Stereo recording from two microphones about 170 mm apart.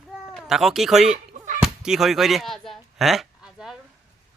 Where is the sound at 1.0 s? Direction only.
45° right (ahead or behind).